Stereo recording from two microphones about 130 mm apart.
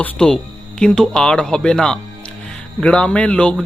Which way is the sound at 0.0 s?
5° left (ahead or behind).